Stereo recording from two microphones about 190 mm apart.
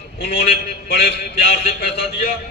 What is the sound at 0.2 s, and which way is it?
A man's voice, 55° left (ahead or behind).